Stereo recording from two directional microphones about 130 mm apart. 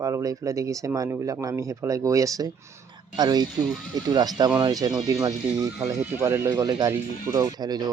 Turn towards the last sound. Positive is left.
turn(degrees=-30)  # may be behind; listen again after turning